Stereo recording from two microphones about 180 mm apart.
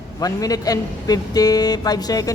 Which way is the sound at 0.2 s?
20° left (ahead or behind).